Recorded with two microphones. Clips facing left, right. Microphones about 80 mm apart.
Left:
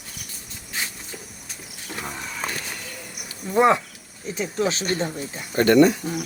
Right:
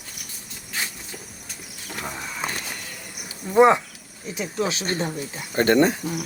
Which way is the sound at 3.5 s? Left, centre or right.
Centre.